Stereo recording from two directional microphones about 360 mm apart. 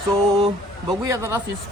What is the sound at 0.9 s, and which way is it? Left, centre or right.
Speech, centre.